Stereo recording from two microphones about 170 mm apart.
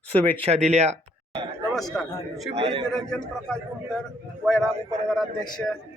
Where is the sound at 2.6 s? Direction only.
35° right (ahead or behind).